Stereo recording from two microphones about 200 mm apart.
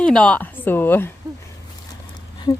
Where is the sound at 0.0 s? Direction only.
5° left (ahead or behind).